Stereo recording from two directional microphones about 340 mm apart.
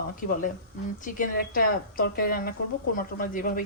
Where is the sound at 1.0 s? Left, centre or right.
Left.